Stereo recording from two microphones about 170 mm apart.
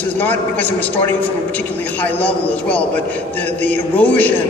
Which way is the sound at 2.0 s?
10° left (ahead or behind).